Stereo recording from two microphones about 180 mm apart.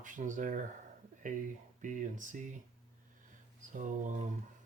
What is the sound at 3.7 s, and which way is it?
Speech, 45° right (ahead or behind).